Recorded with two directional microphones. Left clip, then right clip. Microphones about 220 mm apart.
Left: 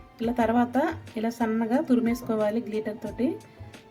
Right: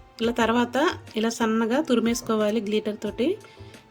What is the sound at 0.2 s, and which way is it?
A woman's voice, 20° right (ahead or behind).